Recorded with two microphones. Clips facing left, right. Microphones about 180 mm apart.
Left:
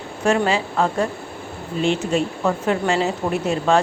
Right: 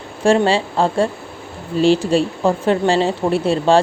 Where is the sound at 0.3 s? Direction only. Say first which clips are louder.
Right 4 dB; 30° right (ahead or behind).